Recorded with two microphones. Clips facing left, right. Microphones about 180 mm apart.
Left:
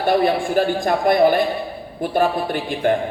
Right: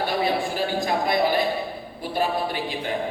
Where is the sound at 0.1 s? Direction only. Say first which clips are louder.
Left 7 dB; 50° left (ahead or behind).